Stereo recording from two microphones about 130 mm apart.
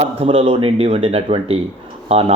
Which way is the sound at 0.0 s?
50° right (ahead or behind).